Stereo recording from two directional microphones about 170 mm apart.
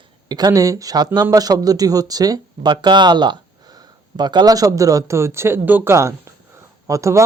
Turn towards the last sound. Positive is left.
turn(degrees=-20)  # may be behind; listen again after turning